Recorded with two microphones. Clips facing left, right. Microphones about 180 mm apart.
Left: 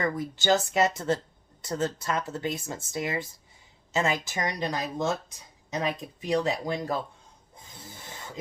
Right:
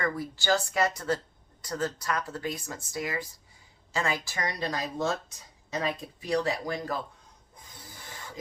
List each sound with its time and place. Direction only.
0.0 s speech: 20° left (ahead or behind)
7.5 s rub: 25° left (ahead or behind)